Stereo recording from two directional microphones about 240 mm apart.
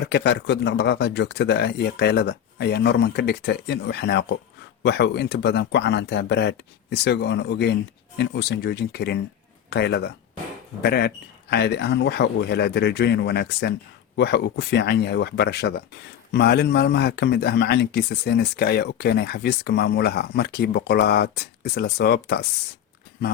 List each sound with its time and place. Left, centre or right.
0.0 s a man's voice: left